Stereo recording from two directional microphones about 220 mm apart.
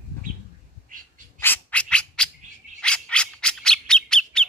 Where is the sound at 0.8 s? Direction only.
40° right (ahead or behind).